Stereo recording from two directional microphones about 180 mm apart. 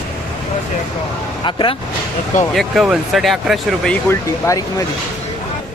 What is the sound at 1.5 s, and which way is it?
Speech, 25° left (ahead or behind).